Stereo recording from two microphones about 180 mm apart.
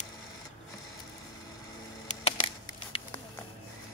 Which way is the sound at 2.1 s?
35° left (ahead or behind).